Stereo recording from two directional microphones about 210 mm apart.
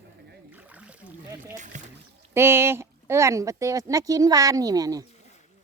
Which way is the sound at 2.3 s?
10° right (ahead or behind).